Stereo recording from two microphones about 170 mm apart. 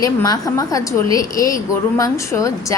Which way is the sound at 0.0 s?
20° left (ahead or behind).